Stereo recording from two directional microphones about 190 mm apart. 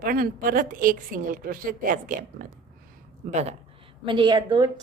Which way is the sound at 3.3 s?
35° right (ahead or behind).